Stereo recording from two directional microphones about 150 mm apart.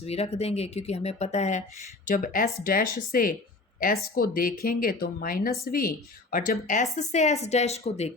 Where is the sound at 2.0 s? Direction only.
65° left (ahead or behind); by 8.1 s 45° left (ahead or behind).